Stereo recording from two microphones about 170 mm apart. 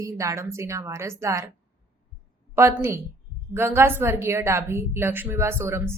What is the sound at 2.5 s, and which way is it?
A woman's voice, 15° right (ahead or behind).